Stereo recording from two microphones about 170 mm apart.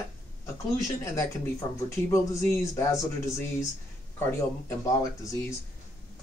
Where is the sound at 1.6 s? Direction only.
20° left (ahead or behind).